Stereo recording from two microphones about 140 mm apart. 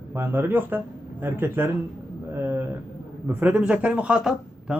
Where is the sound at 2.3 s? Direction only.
15° right (ahead or behind).